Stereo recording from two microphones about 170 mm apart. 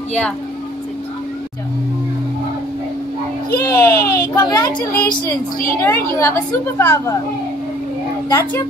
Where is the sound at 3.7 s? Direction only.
20° left (ahead or behind).